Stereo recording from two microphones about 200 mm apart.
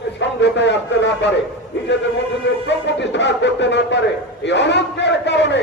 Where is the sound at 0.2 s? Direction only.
60° left (ahead or behind).